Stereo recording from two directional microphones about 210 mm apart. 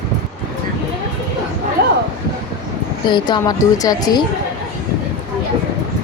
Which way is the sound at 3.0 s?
20° left (ahead or behind).